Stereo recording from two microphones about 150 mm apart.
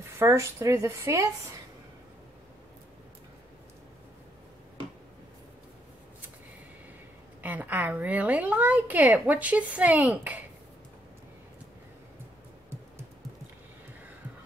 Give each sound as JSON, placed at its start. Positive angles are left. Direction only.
{"t": 0.2, "sound": "a woman's voice", "side_deg": -20}
{"t": 7.4, "sound": "a woman's voice", "side_deg": -10}